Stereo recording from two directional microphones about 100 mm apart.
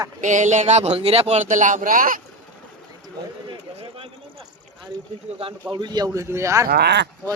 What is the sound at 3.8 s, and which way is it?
Speech, 70° right (ahead or behind).